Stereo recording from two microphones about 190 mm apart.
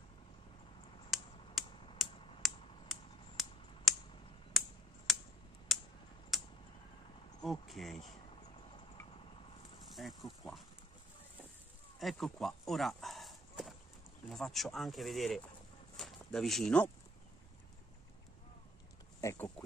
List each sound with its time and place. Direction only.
1.1 s finger snapping: centre (ahead or behind)
4.6 s computer keyboard: centre (ahead or behind)
5.1 s a sound: centre (ahead or behind)
5.7 s typing: centre (ahead or behind)
7.4 s speech: centre (ahead or behind)
10.0 s speech: centre (ahead or behind)
12.0 s a sound: centre (ahead or behind)
14.3 s speech: centre (ahead or behind)
19.2 s speech: 10° left (ahead or behind)